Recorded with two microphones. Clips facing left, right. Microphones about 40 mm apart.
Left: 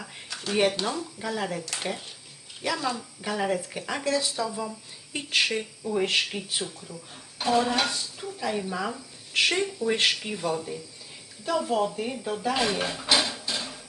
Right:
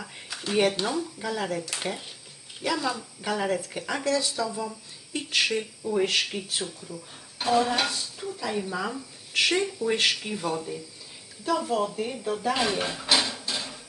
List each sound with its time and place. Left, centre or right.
0.0 s a sound: centre
0.6 s speech: centre
4.0 s speech: centre
5.5 s speech: centre